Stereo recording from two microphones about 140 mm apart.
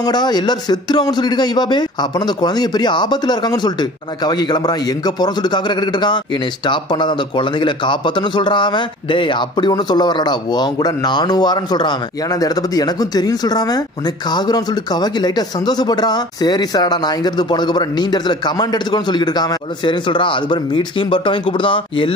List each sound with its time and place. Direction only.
0.0 s a man's voice: 30° left (ahead or behind)